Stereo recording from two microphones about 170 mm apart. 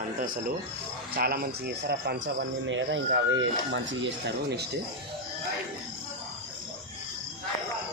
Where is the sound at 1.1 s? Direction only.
60° right (ahead or behind); by 4.6 s 85° right.